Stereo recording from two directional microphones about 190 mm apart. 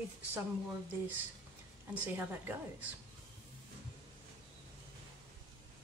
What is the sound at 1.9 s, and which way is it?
Speech, 10° right (ahead or behind).